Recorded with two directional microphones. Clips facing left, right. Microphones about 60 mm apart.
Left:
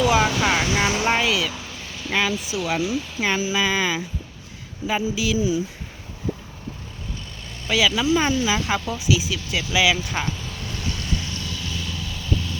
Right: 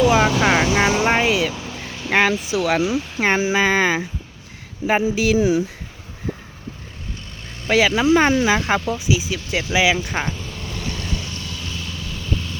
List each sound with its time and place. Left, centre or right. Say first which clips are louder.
0.1 s speech: right 3 dB; right
0.9 s speech: right 3 dB; right
2.0 s speech: right 5 dB; right
3.2 s speech: right 5 dB; right
7.6 s speech: right 4 dB; right
9.7 s speech: right 2 dB; right